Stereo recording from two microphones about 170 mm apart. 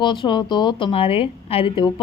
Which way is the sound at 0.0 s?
25° left (ahead or behind).